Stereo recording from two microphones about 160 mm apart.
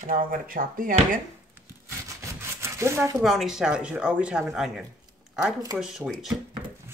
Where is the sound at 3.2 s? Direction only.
Centre (ahead or behind).